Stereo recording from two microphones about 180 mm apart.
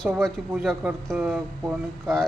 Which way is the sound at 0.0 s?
5° right (ahead or behind).